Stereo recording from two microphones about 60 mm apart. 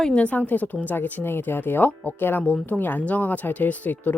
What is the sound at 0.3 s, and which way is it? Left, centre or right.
Speech, left.